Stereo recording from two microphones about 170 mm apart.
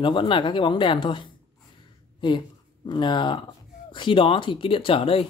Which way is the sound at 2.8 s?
25° left (ahead or behind).